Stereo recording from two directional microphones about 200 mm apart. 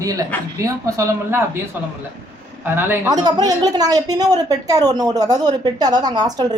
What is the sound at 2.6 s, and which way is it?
A woman's voice, 10° right (ahead or behind).